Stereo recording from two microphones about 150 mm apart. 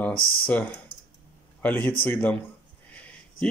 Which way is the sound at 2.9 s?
10° left (ahead or behind).